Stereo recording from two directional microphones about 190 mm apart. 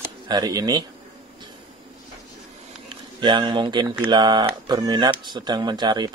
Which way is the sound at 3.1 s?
25° right (ahead or behind).